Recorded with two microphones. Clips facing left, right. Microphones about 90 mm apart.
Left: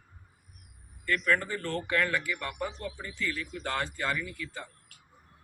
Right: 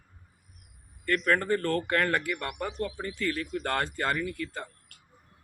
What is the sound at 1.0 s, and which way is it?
Speech, 45° right (ahead or behind).